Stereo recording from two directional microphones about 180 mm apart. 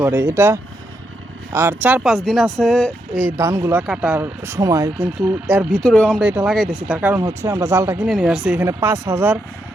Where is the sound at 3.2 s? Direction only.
15° right (ahead or behind).